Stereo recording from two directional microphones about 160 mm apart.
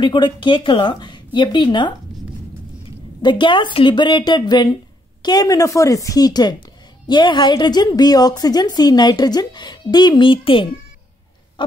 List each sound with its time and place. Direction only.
0.0 s a woman's voice: 30° left (ahead or behind)